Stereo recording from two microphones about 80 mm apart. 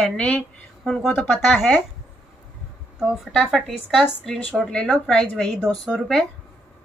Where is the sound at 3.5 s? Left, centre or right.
Centre.